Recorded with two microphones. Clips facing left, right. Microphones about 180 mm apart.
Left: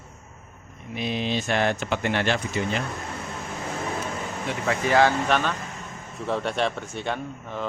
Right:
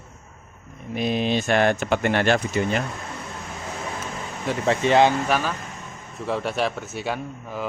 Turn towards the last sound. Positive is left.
turn(degrees=-5)  # may be behind; listen again after turning